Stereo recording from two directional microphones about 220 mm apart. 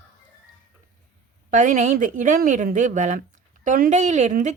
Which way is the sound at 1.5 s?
35° right (ahead or behind).